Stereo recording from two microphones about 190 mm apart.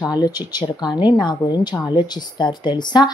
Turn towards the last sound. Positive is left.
turn(degrees=25)  # may be behind; listen again after turning